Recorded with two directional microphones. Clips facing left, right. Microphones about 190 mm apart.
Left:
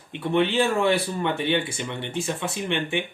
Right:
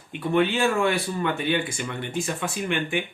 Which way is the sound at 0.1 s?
25° left (ahead or behind).